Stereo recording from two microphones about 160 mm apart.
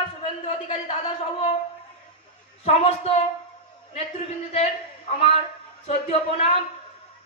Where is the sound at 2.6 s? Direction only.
40° left (ahead or behind).